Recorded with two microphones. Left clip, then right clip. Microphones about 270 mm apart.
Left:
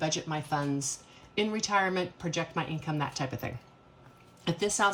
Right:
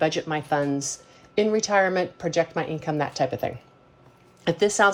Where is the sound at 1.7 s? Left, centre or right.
Centre.